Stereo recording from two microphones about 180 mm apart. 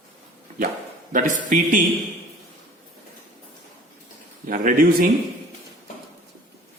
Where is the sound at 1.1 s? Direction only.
45° right (ahead or behind).